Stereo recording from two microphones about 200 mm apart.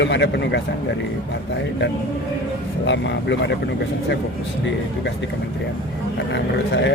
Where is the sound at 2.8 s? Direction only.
65° left (ahead or behind).